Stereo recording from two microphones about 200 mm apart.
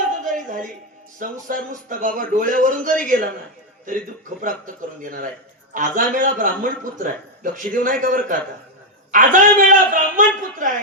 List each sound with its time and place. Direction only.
0.3 s a sound: 40° right (ahead or behind)
1.2 s a man's voice: 40° right (ahead or behind)
4.4 s a man's voice: 40° right (ahead or behind)